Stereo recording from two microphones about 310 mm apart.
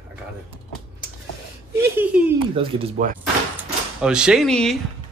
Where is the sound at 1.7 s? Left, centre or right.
Centre.